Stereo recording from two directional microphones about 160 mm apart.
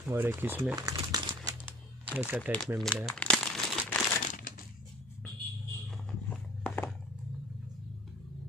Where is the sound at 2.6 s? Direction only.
Centre (ahead or behind).